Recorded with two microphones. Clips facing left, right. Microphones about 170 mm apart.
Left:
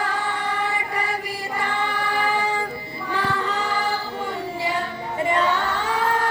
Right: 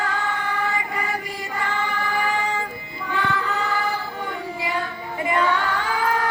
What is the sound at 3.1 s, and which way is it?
Music, 35° left (ahead or behind).